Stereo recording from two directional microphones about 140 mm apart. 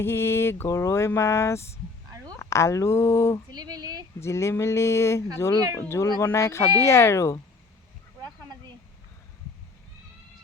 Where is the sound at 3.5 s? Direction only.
30° right (ahead or behind).